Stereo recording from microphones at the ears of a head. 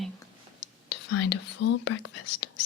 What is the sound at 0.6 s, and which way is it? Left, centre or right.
Speech, left.